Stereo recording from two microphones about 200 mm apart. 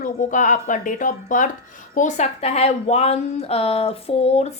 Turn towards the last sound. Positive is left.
turn(degrees=30)  # may be behind; listen again after turning